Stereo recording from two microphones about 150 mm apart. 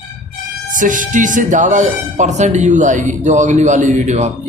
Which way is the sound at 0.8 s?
60° right (ahead or behind).